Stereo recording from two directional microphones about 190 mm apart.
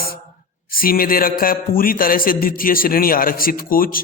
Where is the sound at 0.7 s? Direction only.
50° left (ahead or behind).